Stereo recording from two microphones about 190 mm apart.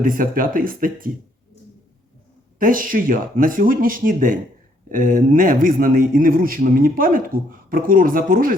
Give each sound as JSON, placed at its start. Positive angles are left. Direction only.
{"t": 0.0, "sound": "a man's voice", "side_deg": -45}
{"t": 2.6, "sound": "a man's voice", "side_deg": -45}